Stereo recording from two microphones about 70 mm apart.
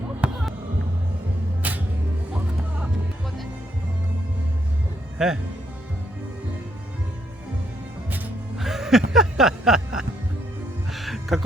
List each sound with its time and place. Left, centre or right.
0.2 s fireworks: centre
1.6 s music: right
5.1 s speech: centre
8.5 s music: centre